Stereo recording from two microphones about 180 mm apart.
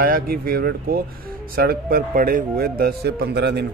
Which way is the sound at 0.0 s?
55° right (ahead or behind).